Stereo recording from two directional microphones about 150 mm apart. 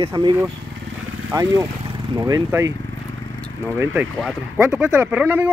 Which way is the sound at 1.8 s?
25° right (ahead or behind).